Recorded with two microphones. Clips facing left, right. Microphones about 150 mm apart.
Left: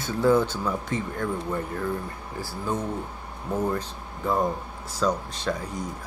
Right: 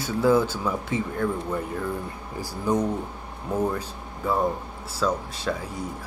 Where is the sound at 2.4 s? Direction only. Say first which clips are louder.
Right 5 dB; 15° right (ahead or behind).